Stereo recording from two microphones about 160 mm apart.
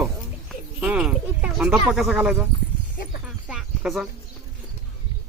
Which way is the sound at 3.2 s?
5° right (ahead or behind).